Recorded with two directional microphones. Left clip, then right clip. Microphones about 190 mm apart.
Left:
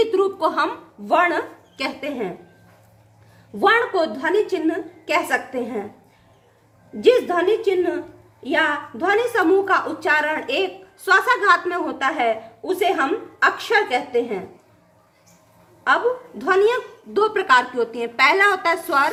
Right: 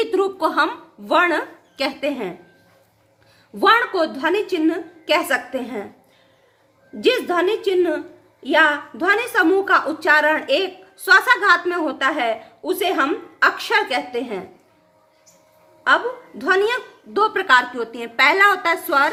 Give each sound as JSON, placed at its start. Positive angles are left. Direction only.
{"t": 0.0, "sound": "a woman's voice", "side_deg": -25}
{"t": 3.6, "sound": "a woman's voice", "side_deg": -30}
{"t": 7.0, "sound": "a woman's voice", "side_deg": -30}
{"t": 16.4, "sound": "a woman's voice", "side_deg": -25}